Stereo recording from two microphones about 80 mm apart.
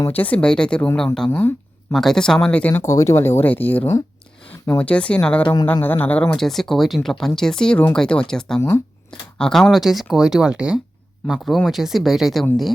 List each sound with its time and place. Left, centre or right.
0.1 s speech: centre
1.3 s speech: left
1.9 s speech: centre
2.8 s speech: left
6.3 s speech: centre
11.5 s speech: centre